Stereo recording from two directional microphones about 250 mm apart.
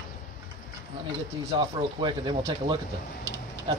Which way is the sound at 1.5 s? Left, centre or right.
Centre.